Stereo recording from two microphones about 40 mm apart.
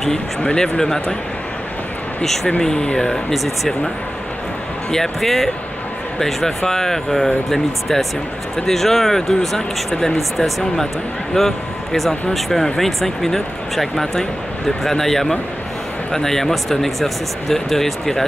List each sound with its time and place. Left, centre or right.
0.4 s speech: centre
2.6 s speech: centre
4.9 s speech: centre